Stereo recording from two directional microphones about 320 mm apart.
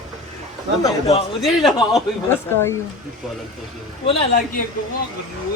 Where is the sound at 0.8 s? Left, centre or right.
Centre.